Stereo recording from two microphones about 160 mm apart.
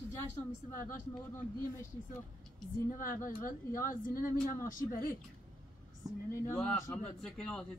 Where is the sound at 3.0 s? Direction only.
55° left (ahead or behind).